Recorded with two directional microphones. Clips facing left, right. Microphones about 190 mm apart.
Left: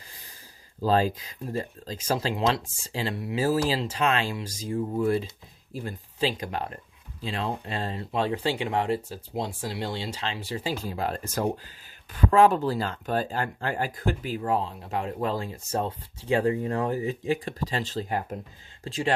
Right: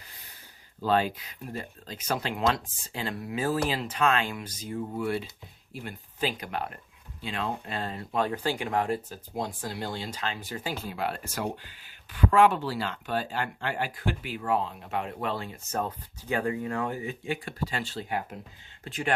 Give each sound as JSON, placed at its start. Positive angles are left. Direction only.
{"t": 0.8, "sound": "speech", "side_deg": 35}